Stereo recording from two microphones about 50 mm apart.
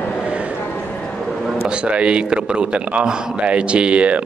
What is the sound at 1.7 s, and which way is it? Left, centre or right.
A man's voice, right.